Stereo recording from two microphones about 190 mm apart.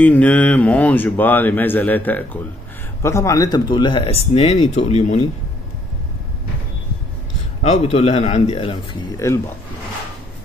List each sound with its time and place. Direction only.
0.0 s speech: 5° left (ahead or behind); by 5.2 s 35° left (ahead or behind)
7.6 s speech: 35° left (ahead or behind)
9.1 s speech: 15° left (ahead or behind)